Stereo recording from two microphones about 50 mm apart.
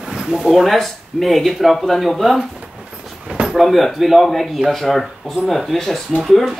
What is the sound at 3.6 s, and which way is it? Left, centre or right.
Speech, centre.